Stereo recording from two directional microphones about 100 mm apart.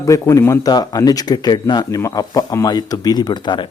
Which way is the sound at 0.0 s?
35° left (ahead or behind).